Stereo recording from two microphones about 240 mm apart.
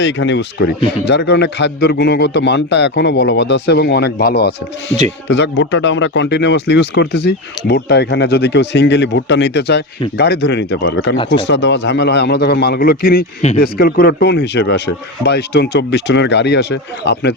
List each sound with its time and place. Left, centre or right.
0.0 s a man's voice: left